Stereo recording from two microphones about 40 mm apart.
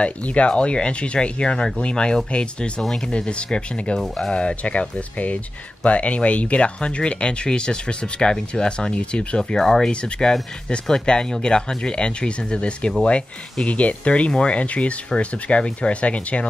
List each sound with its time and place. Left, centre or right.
0.0 s speech: left
9.4 s speech: centre
9.8 s speech: left